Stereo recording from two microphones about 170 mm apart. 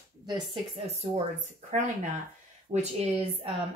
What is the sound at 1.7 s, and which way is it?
Speech, 40° right (ahead or behind).